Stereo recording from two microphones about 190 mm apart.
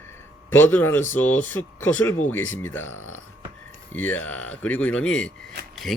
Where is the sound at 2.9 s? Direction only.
90° left.